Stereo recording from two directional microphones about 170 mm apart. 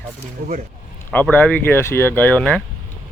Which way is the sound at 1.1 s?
10° left (ahead or behind).